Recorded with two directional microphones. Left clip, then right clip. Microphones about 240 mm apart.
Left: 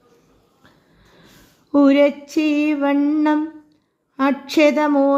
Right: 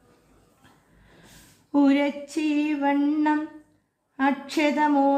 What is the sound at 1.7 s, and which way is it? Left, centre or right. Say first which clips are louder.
Music: left 8 dB; centre.